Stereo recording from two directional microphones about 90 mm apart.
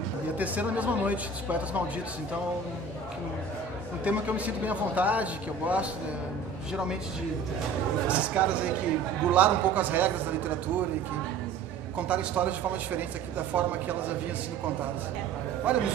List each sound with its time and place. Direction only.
0.4 s a man's voice: 15° right (ahead or behind)
4.0 s a man's voice: 15° right (ahead or behind)
8.1 s a man's voice: 15° right (ahead or behind)
12.1 s a man's voice: 15° right (ahead or behind)
15.7 s a man's voice: 15° right (ahead or behind)